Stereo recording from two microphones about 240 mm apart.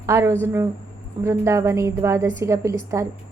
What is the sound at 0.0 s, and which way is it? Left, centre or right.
A woman's voice, centre.